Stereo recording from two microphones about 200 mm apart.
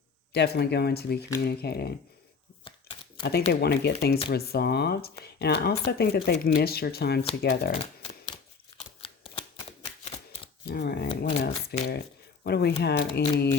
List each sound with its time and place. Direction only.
0.3 s speech: 55° left (ahead or behind)
3.2 s speech: 55° left (ahead or behind)
9.0 s shuffling cards: 30° left (ahead or behind)
10.7 s a sound: 50° left (ahead or behind)
11.2 s shuffling cards: 55° left (ahead or behind)
11.9 s speech: 50° left (ahead or behind)